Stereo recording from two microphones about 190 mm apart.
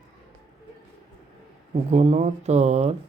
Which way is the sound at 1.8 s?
35° right (ahead or behind).